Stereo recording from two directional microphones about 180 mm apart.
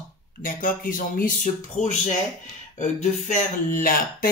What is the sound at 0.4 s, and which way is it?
Speech, 50° left (ahead or behind).